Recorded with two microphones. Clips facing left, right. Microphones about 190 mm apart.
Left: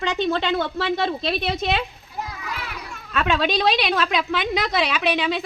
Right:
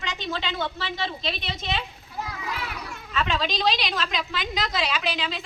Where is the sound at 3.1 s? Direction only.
60° left (ahead or behind).